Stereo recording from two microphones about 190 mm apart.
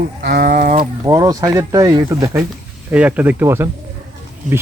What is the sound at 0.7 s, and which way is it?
Speech, 20° right (ahead or behind).